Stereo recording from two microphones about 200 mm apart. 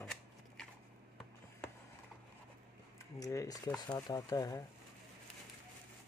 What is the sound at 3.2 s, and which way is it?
Speech, 15° left (ahead or behind).